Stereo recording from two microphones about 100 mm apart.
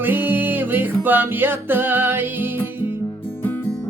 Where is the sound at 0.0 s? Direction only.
20° right (ahead or behind).